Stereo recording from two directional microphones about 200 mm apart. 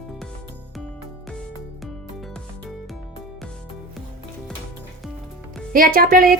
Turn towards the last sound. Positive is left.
turn(degrees=-45)  # may be behind; listen again after turning